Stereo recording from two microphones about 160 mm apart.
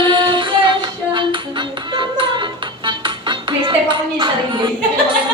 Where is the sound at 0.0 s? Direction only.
30° right (ahead or behind).